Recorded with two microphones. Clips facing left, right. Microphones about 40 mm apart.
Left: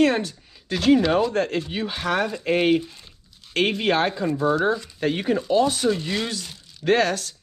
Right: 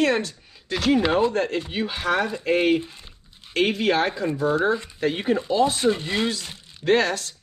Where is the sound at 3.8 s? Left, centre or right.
Left.